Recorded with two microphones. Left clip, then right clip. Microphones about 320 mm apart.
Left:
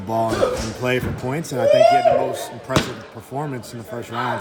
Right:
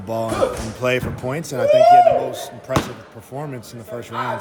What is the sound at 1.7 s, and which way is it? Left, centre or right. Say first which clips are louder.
Speech: right 3 dB; right.